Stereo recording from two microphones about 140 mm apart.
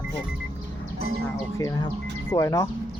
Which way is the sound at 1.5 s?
25° left (ahead or behind).